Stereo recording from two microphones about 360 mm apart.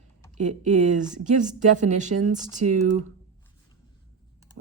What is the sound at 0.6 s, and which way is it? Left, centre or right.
Speech, right.